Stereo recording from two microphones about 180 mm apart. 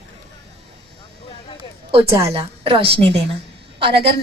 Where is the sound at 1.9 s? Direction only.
35° right (ahead or behind).